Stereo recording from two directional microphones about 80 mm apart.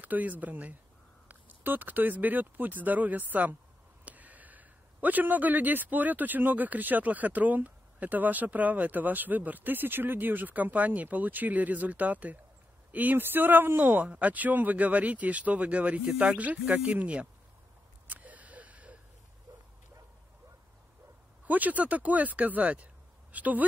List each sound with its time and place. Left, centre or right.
0.0 s a man's voice: right
18.0 s a sound: centre
21.5 s a man's voice: right